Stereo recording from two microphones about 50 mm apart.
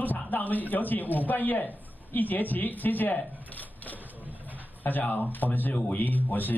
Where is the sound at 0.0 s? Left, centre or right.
Left.